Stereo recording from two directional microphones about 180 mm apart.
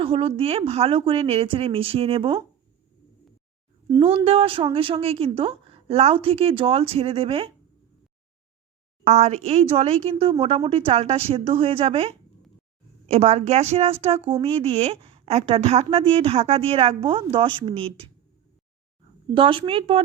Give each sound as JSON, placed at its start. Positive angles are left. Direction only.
{"t": 0.0, "sound": "a woman's voice", "side_deg": -30}
{"t": 4.0, "sound": "a woman's voice", "side_deg": -35}
{"t": 9.0, "sound": "a woman's voice", "side_deg": -40}
{"t": 19.3, "sound": "a woman's voice", "side_deg": -30}